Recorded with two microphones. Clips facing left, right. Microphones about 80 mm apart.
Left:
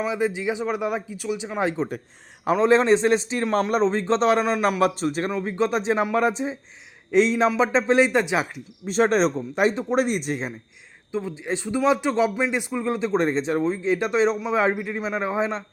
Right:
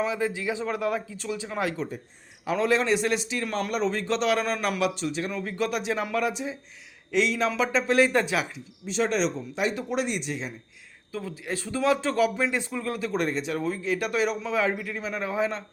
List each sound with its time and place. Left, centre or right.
0.0 s a man's voice: centre
4.4 s speech: centre
4.8 s a man's voice: left
5.3 s a man's voice: left
8.4 s a man's voice: left
11.1 s speech: left